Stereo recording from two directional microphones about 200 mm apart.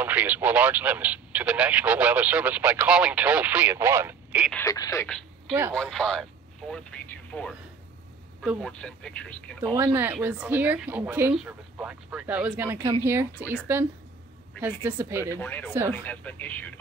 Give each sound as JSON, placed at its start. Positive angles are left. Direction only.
{"t": 0.0, "sound": "speech", "side_deg": -10}
{"t": 4.6, "sound": "speech", "side_deg": 15}
{"t": 5.5, "sound": "speech", "side_deg": -10}
{"t": 9.9, "sound": "speech", "side_deg": -10}
{"t": 14.6, "sound": "speech", "side_deg": -10}
{"t": 15.3, "sound": "speech", "side_deg": 10}